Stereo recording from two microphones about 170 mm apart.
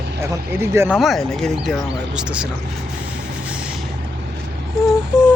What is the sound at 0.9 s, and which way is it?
Speech, centre (ahead or behind).